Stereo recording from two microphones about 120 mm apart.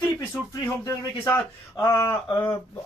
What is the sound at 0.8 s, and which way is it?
Speech, 20° left (ahead or behind).